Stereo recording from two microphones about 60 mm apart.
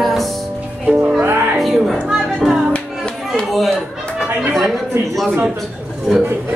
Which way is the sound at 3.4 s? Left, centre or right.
Centre.